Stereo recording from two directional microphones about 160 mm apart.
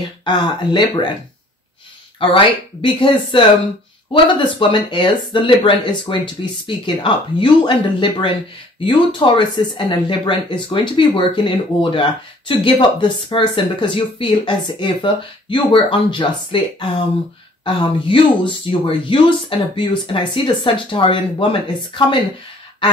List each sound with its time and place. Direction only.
0.2 s speech: 30° left (ahead or behind)
2.1 s speech: 30° left (ahead or behind)
17.6 s speech: 30° left (ahead or behind)